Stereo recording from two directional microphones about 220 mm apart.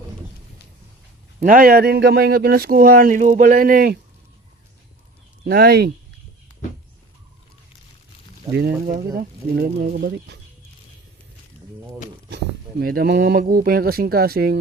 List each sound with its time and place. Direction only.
1.4 s speech: 40° right (ahead or behind)
5.5 s speech: 45° right (ahead or behind)
8.5 s speech: 45° right (ahead or behind)
12.8 s speech: 45° right (ahead or behind)